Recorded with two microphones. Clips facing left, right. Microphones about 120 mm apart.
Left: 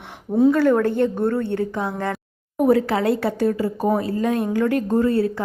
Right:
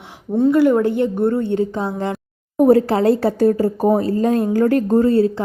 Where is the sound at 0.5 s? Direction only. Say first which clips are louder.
Right 3 dB; 10° right (ahead or behind).